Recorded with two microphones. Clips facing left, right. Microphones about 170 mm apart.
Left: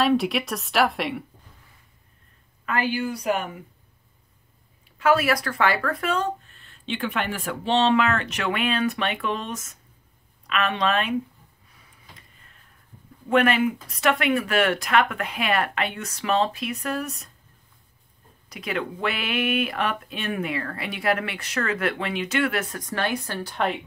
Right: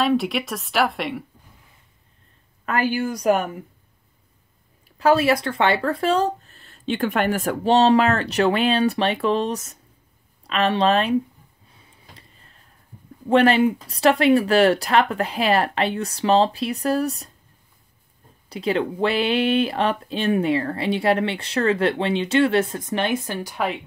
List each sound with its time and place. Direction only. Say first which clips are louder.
0.0 s a woman's voice: right 1 dB; centre (ahead or behind)
2.6 s speech: right 3 dB; 45° right (ahead or behind)
4.9 s speech: right 3 dB; 30° right (ahead or behind)
11.7 s a sound: right 2 dB; 30° right (ahead or behind)
13.3 s speech: right 4 dB; 30° right (ahead or behind)
18.5 s speech: right 7 dB; 30° right (ahead or behind); by 23.6 s 15° right (ahead or behind)